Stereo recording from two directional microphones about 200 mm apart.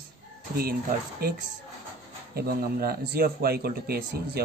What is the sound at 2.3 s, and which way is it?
A man's voice, 50° right (ahead or behind).